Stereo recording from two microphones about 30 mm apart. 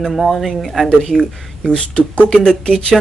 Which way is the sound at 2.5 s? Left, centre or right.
Left.